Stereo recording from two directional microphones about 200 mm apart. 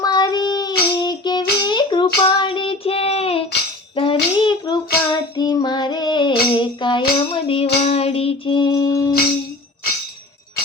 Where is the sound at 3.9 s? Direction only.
25° left (ahead or behind).